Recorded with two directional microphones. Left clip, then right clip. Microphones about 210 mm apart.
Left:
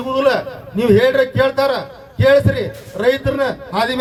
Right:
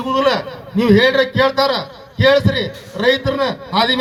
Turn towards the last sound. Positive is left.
turn(degrees=-30)  # may be behind; listen again after turning